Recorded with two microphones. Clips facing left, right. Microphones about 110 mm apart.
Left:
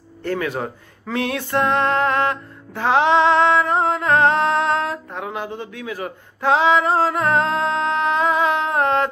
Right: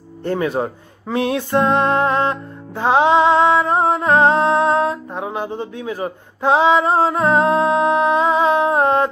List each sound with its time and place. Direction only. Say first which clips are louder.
0.2 s speech: right 4 dB; 20° right (ahead or behind)